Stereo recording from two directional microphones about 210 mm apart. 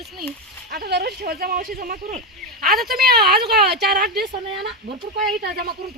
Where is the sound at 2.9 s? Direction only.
45° right (ahead or behind).